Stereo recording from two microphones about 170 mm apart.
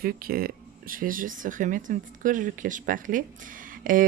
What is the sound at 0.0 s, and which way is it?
Speech, 60° right (ahead or behind).